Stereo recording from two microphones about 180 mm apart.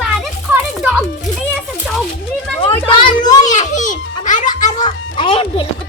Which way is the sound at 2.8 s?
25° left (ahead or behind).